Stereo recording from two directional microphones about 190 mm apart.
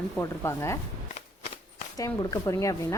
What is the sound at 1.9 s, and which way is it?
A woman's voice, 20° left (ahead or behind).